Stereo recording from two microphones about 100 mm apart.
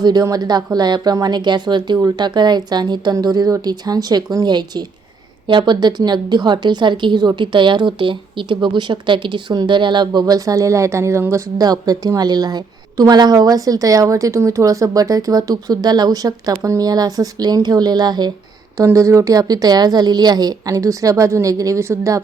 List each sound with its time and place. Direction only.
0.0 s a woman's voice: 40° right (ahead or behind)
18.9 s a woman's voice: 30° right (ahead or behind)